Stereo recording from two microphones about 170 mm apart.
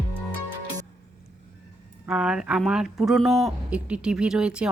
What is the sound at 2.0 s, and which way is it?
Speech, 5° right (ahead or behind).